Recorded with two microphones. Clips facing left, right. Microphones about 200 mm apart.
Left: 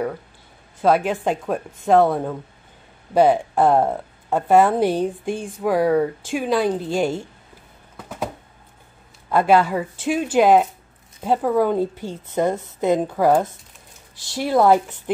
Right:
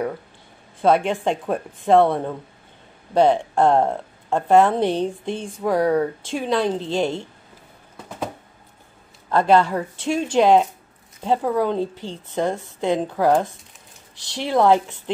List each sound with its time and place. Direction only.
0.7 s speech: 5° left (ahead or behind)
9.3 s speech: 10° left (ahead or behind)